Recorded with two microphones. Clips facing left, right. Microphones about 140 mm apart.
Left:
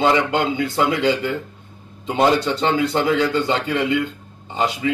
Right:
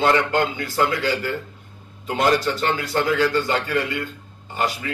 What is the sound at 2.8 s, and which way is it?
A man's voice, 20° left (ahead or behind).